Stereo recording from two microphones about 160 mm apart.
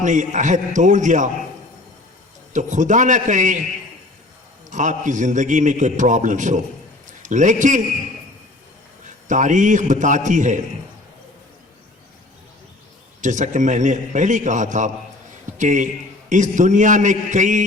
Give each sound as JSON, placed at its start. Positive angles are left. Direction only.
{"t": 0.0, "sound": "a man's voice", "side_deg": -50}
{"t": 2.5, "sound": "a man's voice", "side_deg": -50}
{"t": 4.7, "sound": "a man's voice", "side_deg": -50}
{"t": 9.2, "sound": "a man's voice", "side_deg": -50}
{"t": 13.2, "sound": "a man's voice", "side_deg": -50}